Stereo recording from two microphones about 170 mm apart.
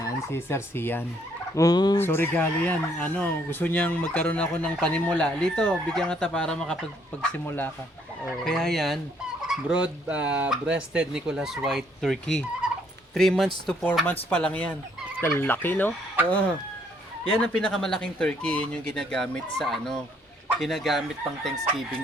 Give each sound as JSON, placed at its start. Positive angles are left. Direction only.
{"t": 0.0, "sound": "turkey", "side_deg": 15}
{"t": 1.5, "sound": "fowl", "side_deg": 20}
{"t": 2.0, "sound": "speech", "side_deg": 15}
{"t": 12.6, "sound": "turkey", "side_deg": -5}
{"t": 13.1, "sound": "speech", "side_deg": 0}
{"t": 17.2, "sound": "speech", "side_deg": 5}